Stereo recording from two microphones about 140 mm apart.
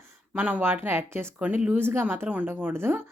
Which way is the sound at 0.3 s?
10° right (ahead or behind).